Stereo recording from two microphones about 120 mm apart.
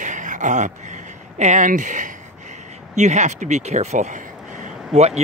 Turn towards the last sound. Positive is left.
turn(degrees=-65)  # may be behind; listen again after turning